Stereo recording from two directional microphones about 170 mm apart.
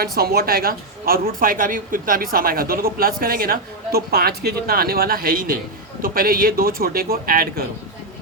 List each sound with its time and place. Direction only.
0.0 s speech: 65° right (ahead or behind)